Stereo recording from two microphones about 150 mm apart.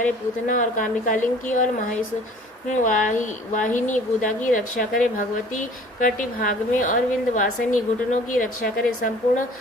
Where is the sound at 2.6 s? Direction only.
60° left (ahead or behind).